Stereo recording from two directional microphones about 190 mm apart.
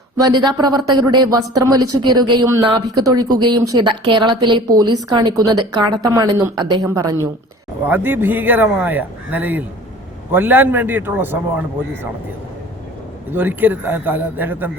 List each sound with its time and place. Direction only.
0.2 s a woman's voice: 20° right (ahead or behind)
13.3 s speech: 10° right (ahead or behind)